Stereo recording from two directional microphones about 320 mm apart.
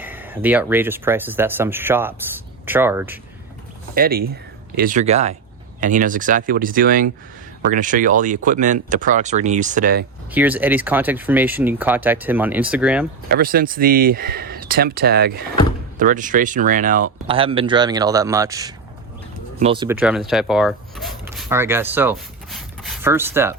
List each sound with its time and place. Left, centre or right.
0.0 s speech: centre
3.9 s speech: right
10.3 s speech: centre
13.2 s speech: right; by 23.6 s centre